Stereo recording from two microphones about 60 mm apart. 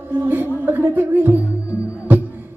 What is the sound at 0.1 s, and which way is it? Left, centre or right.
Music, right.